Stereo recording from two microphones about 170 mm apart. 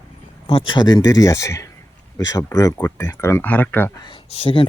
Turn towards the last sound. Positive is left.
turn(degrees=30)  # may be behind; listen again after turning